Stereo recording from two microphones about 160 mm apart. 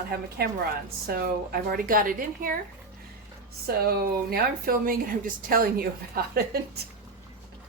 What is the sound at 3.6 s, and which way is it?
A woman's voice, 75° right (ahead or behind).